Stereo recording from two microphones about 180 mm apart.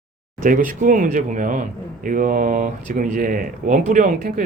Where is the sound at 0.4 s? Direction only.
45° right (ahead or behind).